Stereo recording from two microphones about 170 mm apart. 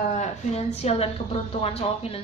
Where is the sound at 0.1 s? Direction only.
40° left (ahead or behind).